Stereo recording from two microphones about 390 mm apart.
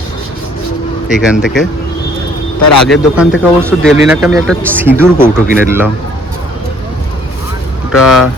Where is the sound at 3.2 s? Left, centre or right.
Centre.